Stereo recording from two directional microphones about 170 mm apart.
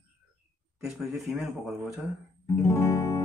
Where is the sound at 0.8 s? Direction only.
Centre (ahead or behind).